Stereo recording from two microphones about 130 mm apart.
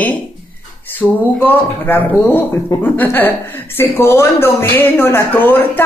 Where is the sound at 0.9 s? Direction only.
15° left (ahead or behind).